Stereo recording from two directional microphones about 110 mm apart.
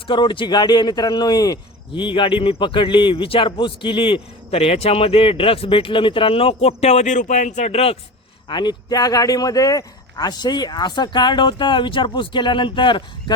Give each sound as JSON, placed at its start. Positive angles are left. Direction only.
{"t": 0.1, "sound": "speech", "side_deg": 45}
{"t": 8.4, "sound": "speech", "side_deg": 45}